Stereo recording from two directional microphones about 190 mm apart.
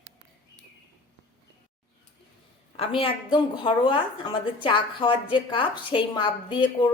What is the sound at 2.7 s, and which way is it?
A woman's voice, 30° left (ahead or behind).